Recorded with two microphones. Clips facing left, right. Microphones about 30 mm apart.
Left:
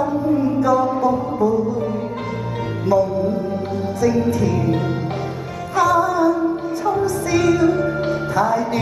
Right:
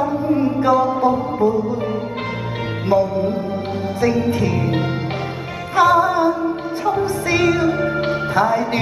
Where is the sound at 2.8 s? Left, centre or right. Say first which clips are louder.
Even; right.